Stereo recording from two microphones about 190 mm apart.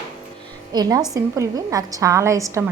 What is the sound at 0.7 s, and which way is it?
A woman's voice, 20° right (ahead or behind).